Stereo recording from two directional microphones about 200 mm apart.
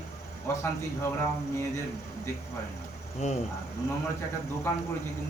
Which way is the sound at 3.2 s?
35° left (ahead or behind).